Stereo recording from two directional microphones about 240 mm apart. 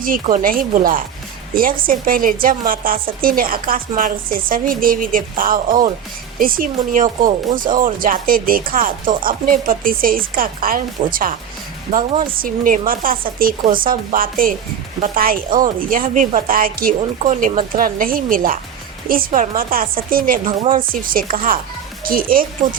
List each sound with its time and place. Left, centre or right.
0.0 s a woman's voice: right